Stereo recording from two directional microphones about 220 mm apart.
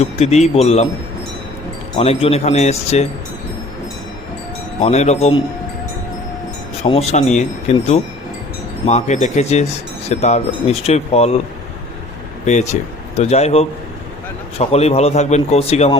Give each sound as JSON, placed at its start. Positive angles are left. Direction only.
{"t": 0.0, "sound": "a man's voice", "side_deg": 30}
{"t": 2.0, "sound": "a man's voice", "side_deg": 25}
{"t": 4.8, "sound": "speech", "side_deg": 30}
{"t": 6.8, "sound": "a man's voice", "side_deg": 30}
{"t": 13.1, "sound": "a man's voice", "side_deg": 30}